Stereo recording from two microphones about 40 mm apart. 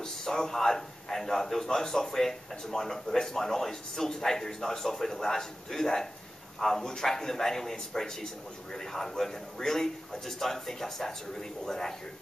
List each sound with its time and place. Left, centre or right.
0.0 s a man's voice: centre